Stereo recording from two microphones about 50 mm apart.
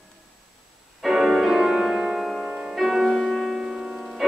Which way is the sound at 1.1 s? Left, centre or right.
Centre.